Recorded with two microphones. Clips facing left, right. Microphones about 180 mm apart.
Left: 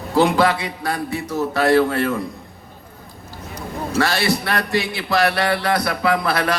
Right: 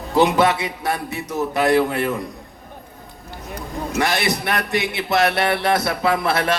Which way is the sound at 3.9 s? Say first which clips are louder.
Left 2 dB; 20° right (ahead or behind).